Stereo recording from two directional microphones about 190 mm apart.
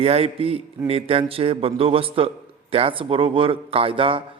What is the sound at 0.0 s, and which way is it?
A man's voice, 30° right (ahead or behind).